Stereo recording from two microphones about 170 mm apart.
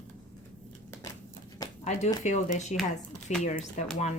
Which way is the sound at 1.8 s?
40° left (ahead or behind).